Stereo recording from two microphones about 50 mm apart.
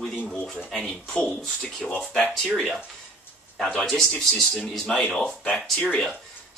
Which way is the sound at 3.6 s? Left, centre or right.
Centre.